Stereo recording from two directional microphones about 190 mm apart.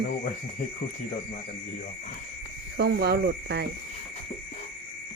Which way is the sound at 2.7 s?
60° right (ahead or behind).